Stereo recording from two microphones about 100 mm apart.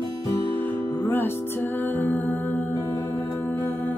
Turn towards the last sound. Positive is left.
turn(degrees=15)  # may be behind; listen again after turning